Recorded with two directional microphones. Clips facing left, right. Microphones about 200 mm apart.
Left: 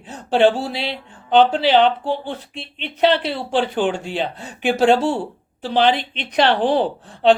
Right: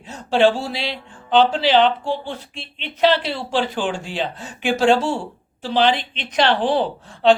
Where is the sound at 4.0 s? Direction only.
60° left (ahead or behind).